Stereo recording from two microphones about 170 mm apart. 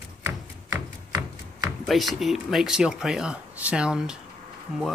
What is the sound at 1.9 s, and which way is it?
Speech, centre (ahead or behind).